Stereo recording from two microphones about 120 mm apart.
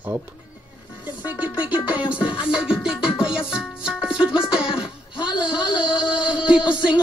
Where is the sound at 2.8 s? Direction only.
5° right (ahead or behind).